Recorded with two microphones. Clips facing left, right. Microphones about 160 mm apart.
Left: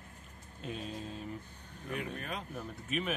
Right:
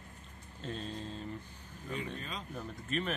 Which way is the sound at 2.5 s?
10° left (ahead or behind).